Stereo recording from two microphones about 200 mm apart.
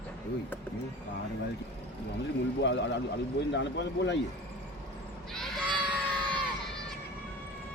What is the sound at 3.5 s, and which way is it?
Speech, 60° left (ahead or behind).